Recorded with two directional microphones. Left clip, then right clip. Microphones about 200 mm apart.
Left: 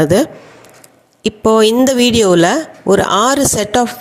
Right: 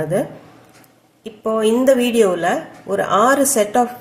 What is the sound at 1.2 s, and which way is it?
A woman's voice, 45° left (ahead or behind).